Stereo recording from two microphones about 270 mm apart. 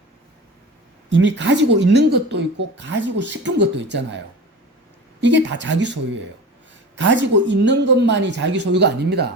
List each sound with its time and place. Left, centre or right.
1.1 s speech: right
5.2 s speech: right